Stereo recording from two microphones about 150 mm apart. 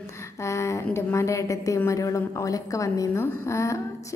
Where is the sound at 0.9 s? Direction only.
20° left (ahead or behind).